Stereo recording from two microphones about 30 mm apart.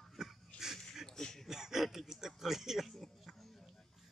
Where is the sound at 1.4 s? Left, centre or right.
Centre.